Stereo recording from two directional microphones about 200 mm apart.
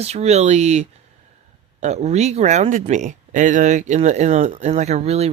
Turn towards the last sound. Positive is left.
turn(degrees=-30)  # may be behind; listen again after turning